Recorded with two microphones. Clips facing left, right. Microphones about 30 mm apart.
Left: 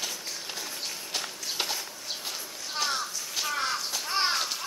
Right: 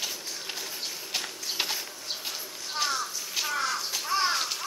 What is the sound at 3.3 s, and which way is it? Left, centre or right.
Crow, centre.